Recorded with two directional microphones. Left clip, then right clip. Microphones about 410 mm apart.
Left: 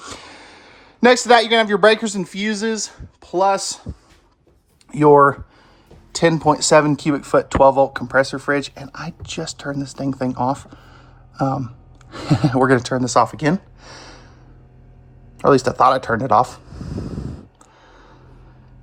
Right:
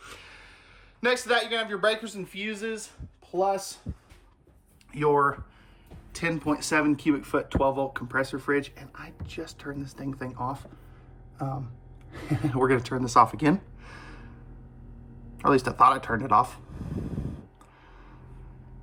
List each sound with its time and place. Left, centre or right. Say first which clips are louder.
0.0 s speech: left 10 dB; centre
4.9 s speech: left 12 dB; centre
12.5 s speech: left 8 dB; centre
15.4 s speech: left 7 dB; centre